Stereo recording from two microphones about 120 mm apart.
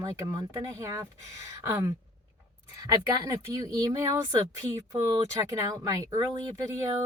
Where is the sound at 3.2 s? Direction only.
30° right (ahead or behind).